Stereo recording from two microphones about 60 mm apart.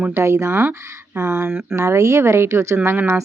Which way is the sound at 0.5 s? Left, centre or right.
Right.